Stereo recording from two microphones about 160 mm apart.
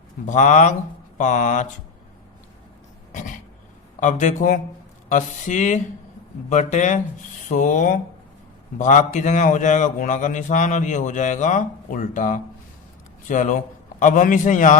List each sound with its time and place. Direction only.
0.3 s a man's voice: 50° left (ahead or behind)
3.1 s a sound: 55° left (ahead or behind)
4.0 s a man's voice: 50° left (ahead or behind)